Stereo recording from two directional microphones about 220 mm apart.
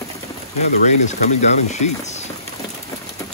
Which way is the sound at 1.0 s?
30° left (ahead or behind).